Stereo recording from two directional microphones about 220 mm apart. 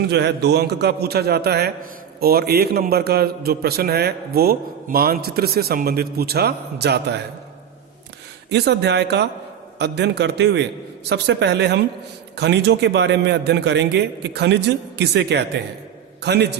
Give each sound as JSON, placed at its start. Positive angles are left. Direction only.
{"t": 0.1, "sound": "a man's voice", "side_deg": -50}
{"t": 8.4, "sound": "a man's voice", "side_deg": -50}